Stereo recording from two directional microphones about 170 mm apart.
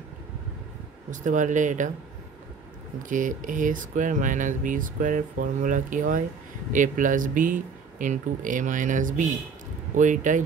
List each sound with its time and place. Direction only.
1.1 s speech: 50° right (ahead or behind)
3.0 s speech: 50° right (ahead or behind)